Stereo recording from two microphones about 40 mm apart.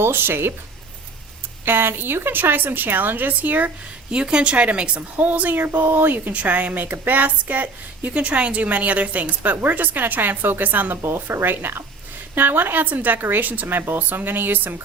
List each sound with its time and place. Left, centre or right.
0.0 s speech: right
1.6 s a woman's voice: right
4.1 s a woman's voice: right
5.5 s a woman's voice: right
6.1 s a woman's voice: right
11.1 s speech: right
11.4 s a woman's voice: right